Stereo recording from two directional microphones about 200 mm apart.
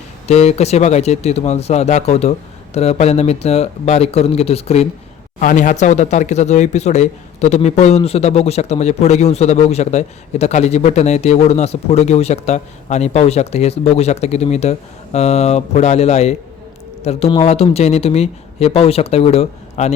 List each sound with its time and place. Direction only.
0.3 s speech: 35° left (ahead or behind)